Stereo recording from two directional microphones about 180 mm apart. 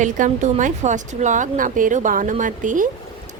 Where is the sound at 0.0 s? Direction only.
45° right (ahead or behind).